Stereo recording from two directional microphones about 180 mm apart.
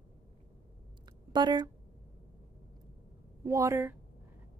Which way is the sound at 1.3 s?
25° right (ahead or behind).